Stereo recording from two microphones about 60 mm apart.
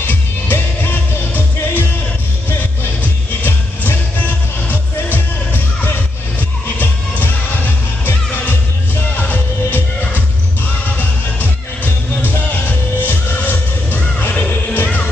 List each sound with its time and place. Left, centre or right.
0.0 s music: left
3.0 s music: left
11.0 s music: left